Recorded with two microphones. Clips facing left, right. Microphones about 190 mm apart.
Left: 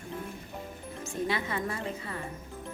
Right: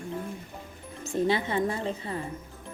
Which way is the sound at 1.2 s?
25° right (ahead or behind).